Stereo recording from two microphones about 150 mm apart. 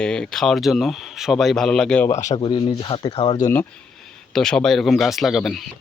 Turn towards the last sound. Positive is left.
turn(degrees=0)  # may be behind; listen again after turning